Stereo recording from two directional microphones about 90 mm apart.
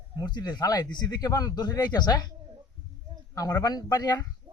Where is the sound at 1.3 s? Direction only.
40° left (ahead or behind).